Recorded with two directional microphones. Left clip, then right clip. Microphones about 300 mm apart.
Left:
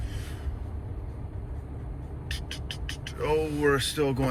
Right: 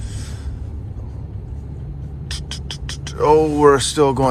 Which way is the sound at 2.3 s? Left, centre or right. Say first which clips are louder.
Right 7 dB; centre.